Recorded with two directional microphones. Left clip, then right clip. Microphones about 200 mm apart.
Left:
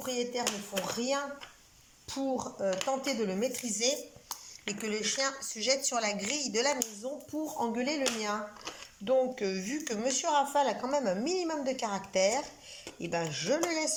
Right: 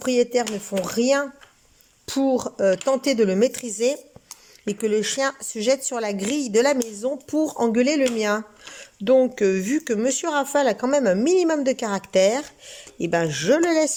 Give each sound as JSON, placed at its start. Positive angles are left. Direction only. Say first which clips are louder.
{"t": 0.0, "sound": "speech", "louder": "right 12 dB", "side_deg": -55}